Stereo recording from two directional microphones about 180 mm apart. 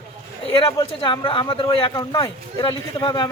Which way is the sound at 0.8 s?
25° left (ahead or behind).